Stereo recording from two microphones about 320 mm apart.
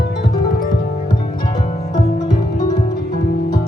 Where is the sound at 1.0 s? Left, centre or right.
Centre.